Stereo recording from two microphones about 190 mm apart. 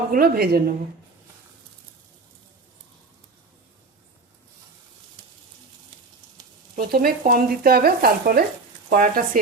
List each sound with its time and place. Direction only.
0.1 s speech: 50° right (ahead or behind)
6.7 s speech: 50° right (ahead or behind)